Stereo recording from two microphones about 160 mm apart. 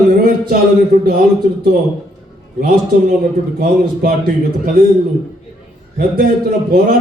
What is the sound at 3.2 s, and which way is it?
A man's voice, 70° right (ahead or behind).